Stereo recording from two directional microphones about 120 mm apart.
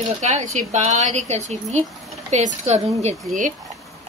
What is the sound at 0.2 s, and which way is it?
Speech, 85° right.